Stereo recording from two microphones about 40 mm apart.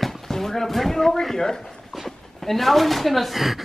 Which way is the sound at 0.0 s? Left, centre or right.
Centre.